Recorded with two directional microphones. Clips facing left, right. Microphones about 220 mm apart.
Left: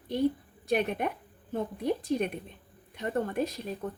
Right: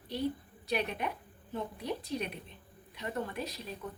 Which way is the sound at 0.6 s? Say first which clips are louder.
Left 6 dB; 50° left (ahead or behind).